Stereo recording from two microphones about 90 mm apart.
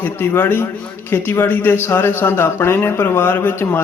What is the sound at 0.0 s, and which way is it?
A man's voice, 25° left (ahead or behind).